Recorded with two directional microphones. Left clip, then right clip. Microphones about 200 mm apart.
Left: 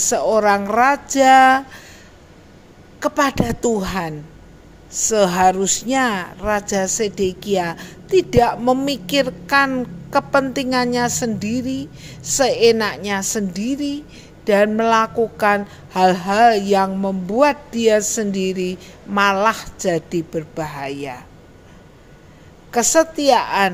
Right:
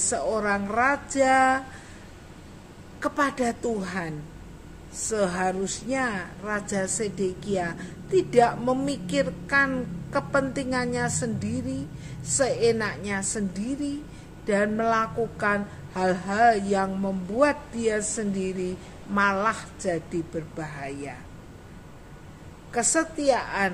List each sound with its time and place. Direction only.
0.0 s a woman's voice: 45° left (ahead or behind)
3.0 s a woman's voice: 40° left (ahead or behind)
22.7 s a woman's voice: 45° left (ahead or behind)